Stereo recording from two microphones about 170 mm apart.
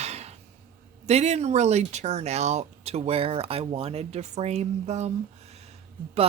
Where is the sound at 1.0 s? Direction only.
40° right (ahead or behind).